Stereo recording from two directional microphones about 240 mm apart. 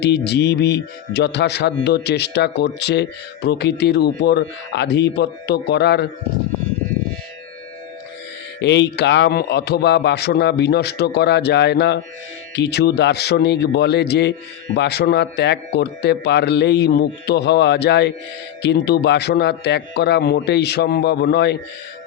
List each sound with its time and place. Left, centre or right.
0.0 s speech: left
8.5 s speech: left